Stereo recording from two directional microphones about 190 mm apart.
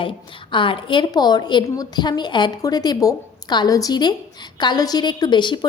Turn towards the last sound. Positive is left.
turn(degrees=25)  # may be behind; listen again after turning